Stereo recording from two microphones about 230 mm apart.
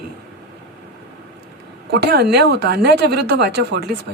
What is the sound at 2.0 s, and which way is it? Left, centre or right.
Speech, right.